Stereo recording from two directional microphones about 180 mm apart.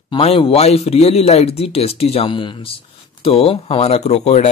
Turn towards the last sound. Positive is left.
turn(degrees=35)  # may be behind; listen again after turning